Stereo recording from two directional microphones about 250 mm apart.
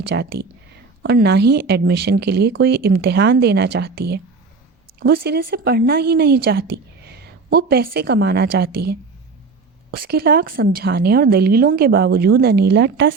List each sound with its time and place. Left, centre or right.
0.1 s speech: right